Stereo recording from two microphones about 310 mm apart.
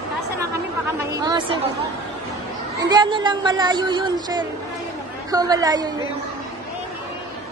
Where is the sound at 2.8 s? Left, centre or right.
Centre.